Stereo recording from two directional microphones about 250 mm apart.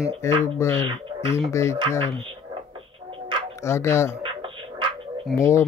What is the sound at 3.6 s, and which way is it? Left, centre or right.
Speech, centre.